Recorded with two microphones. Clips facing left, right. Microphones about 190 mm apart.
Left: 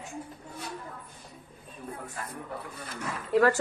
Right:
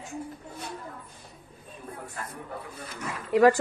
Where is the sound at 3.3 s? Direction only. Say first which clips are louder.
Right 4 dB; 15° right (ahead or behind).